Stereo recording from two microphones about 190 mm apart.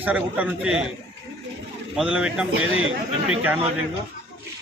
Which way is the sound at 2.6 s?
90° right.